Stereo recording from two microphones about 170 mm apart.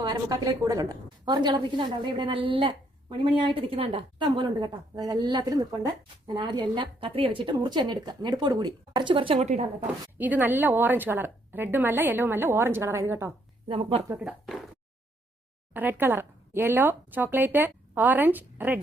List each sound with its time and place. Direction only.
0.0 s a woman's voice: 25° right (ahead or behind)
9.8 s speech: 10° right (ahead or behind)
13.7 s speech: 35° right (ahead or behind)
14.1 s speech: 5° right (ahead or behind)
15.7 s speech: 10° right (ahead or behind)